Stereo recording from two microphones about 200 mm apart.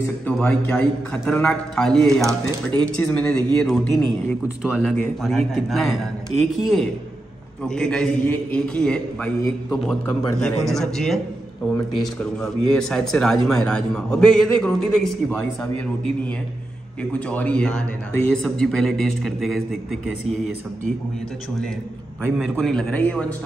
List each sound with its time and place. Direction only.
0.3 s speech: 5° left (ahead or behind)
10.4 s speech: centre (ahead or behind)
22.2 s speech: centre (ahead or behind)